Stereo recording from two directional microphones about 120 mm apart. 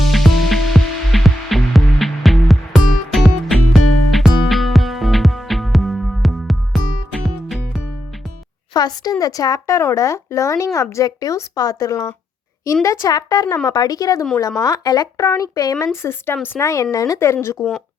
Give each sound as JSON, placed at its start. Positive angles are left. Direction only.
{"t": 0.1, "sound": "music", "side_deg": 0}
{"t": 8.7, "sound": "speech", "side_deg": 35}
{"t": 17.6, "sound": "a woman's voice", "side_deg": 0}